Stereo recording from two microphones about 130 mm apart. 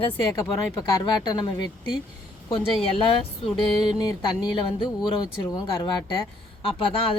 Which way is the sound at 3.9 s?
35° left (ahead or behind).